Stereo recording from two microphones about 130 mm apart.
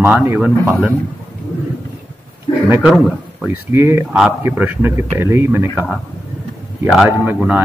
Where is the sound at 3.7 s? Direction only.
20° right (ahead or behind).